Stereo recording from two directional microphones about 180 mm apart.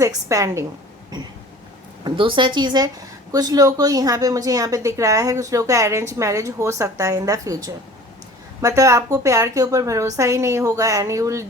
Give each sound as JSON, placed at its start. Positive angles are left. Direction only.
{"t": 0.0, "sound": "a woman's voice", "side_deg": -20}
{"t": 2.0, "sound": "a woman's voice", "side_deg": -25}